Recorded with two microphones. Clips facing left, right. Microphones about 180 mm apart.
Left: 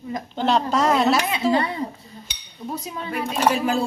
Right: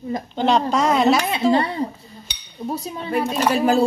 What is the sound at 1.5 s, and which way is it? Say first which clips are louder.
A woman's voice: right 3 dB; 30° right (ahead or behind).